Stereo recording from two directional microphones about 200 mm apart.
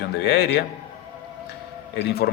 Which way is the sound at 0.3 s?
55° left (ahead or behind).